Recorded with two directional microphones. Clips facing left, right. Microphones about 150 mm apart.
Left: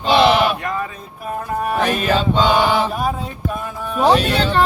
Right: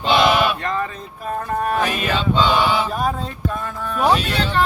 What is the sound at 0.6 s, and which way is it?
Speech, 10° left (ahead or behind).